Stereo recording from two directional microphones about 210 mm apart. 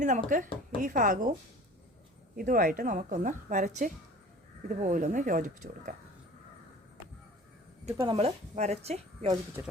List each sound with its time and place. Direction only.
0.0 s a woman's voice: 35° right (ahead or behind)
2.3 s a woman's voice: 40° right (ahead or behind)
7.9 s speech: 15° right (ahead or behind)
8.1 s speech: 30° right (ahead or behind)